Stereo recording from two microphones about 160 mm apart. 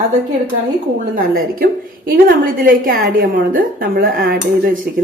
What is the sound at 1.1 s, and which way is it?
A woman's voice, 65° right (ahead or behind).